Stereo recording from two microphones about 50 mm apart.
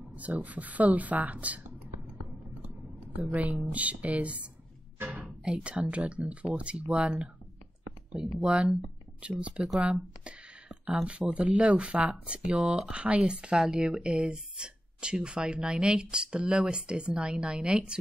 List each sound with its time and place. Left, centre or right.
0.1 s speech: right
3.2 s a woman's voice: right
5.0 s music: right
5.4 s a woman's voice: centre
11.3 s a woman's voice: right